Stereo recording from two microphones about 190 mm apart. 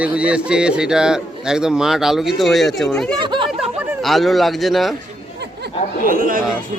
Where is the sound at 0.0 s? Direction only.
5° right (ahead or behind).